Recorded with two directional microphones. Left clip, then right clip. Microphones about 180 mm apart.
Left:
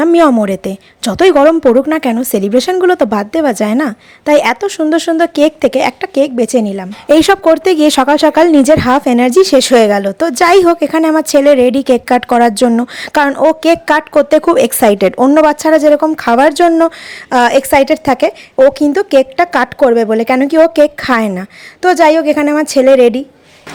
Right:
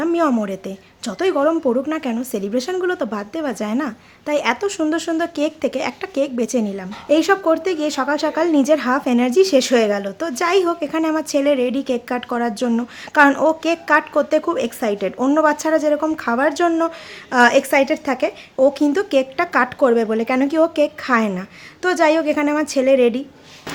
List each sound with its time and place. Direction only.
0.0 s a woman's voice: 45° left (ahead or behind)
7.2 s speech: 45° left (ahead or behind)